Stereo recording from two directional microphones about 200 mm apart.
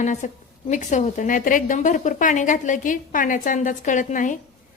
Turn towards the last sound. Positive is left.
turn(degrees=40)  # may be behind; listen again after turning